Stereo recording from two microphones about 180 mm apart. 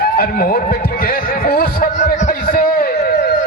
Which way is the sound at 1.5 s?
55° left (ahead or behind).